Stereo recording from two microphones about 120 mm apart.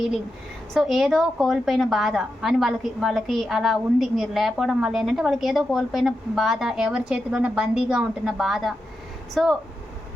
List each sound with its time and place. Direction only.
0.7 s a woman's voice: centre (ahead or behind)